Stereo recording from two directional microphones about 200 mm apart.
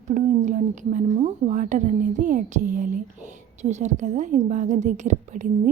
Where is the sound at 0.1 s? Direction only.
40° right (ahead or behind).